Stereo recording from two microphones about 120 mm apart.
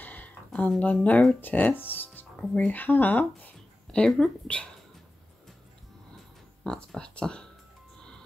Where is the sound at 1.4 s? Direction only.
15° left (ahead or behind).